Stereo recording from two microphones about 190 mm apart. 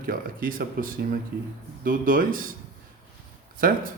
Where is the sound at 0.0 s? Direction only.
45° right (ahead or behind).